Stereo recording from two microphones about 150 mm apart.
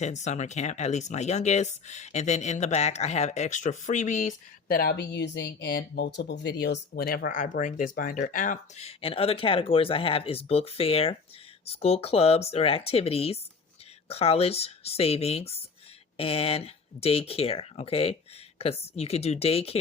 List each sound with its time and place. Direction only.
0.0 s speech: 50° left (ahead or behind)
8.8 s speech: 40° left (ahead or behind)